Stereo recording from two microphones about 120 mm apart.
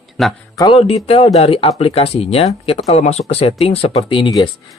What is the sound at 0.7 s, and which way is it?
Speech, 55° left (ahead or behind).